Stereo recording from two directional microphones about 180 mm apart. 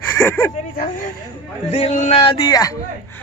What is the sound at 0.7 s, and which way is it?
Speech, 55° left (ahead or behind).